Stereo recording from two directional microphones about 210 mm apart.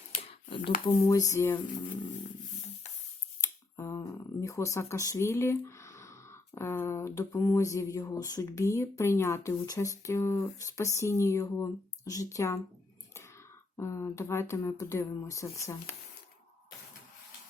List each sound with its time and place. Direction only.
0.2 s a sound: 25° left (ahead or behind)
0.9 s speech: 15° left (ahead or behind)
3.4 s speech: 15° left (ahead or behind)
13.7 s speech: 15° left (ahead or behind)